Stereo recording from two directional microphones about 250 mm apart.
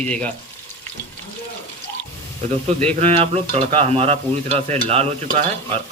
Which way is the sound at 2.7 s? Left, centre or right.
Right.